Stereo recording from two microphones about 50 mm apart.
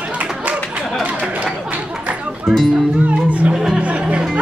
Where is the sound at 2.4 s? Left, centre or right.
Centre.